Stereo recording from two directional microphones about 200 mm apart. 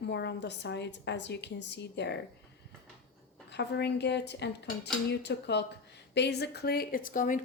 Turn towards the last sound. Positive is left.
turn(degrees=40)  # may be behind; listen again after turning